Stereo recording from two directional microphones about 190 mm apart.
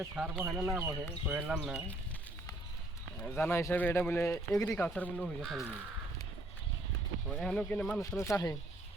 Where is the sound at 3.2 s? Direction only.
10° left (ahead or behind).